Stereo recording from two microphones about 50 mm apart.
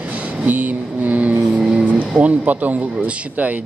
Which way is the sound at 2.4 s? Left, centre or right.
Right.